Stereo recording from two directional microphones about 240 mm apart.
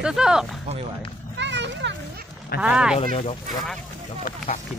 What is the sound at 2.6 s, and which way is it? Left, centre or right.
Speech, centre.